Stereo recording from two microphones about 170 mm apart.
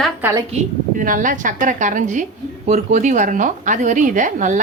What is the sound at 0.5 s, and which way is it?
A woman's voice, 50° right (ahead or behind).